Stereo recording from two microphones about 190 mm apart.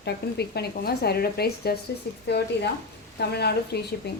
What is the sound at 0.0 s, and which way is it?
Speech, 60° left (ahead or behind).